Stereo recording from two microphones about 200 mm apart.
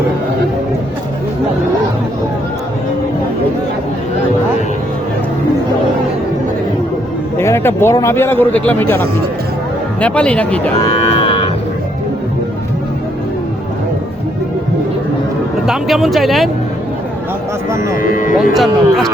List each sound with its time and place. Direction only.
7.3 s speech: 10° left (ahead or behind)
10.8 s cattle: 25° left (ahead or behind)
15.6 s speech: centre (ahead or behind)
17.9 s speech: 45° left (ahead or behind)
18.5 s speech: centre (ahead or behind)